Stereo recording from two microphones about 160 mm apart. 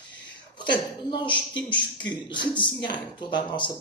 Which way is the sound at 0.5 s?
30° left (ahead or behind).